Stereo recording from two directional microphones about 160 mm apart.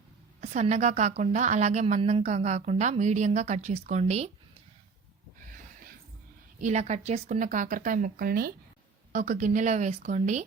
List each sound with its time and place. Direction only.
0.4 s a woman's voice: 45° right (ahead or behind)
6.6 s a woman's voice: 45° right (ahead or behind); by 8.5 s 65° right (ahead or behind)
9.1 s a woman's voice: 50° right (ahead or behind)